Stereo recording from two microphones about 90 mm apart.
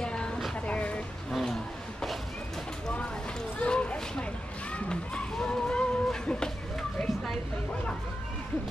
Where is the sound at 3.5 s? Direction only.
10° left (ahead or behind).